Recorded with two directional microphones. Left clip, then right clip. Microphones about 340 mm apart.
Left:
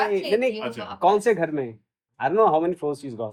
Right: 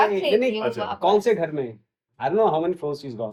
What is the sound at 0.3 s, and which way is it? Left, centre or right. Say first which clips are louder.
Speech: right 2 dB; left.